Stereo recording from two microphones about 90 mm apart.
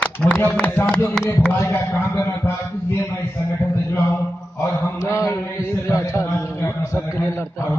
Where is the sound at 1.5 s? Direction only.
30° left (ahead or behind).